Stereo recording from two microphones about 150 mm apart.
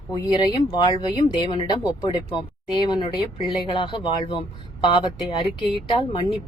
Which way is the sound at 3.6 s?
35° left (ahead or behind).